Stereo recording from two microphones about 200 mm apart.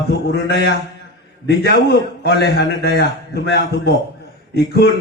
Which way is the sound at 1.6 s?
50° left (ahead or behind).